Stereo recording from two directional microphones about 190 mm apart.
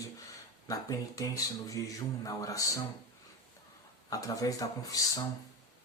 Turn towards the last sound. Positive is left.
turn(degrees=20)  # may be behind; listen again after turning